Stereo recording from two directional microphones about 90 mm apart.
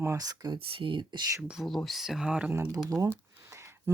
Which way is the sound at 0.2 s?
50° right (ahead or behind).